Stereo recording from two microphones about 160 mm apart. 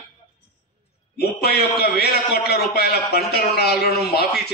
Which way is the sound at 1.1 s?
80° left.